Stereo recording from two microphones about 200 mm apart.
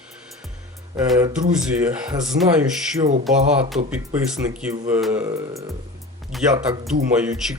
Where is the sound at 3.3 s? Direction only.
35° right (ahead or behind).